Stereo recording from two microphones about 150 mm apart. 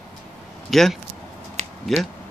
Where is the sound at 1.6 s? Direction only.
50° right (ahead or behind).